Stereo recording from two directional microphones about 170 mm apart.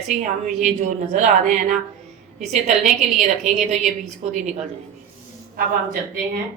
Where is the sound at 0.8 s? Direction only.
45° right (ahead or behind).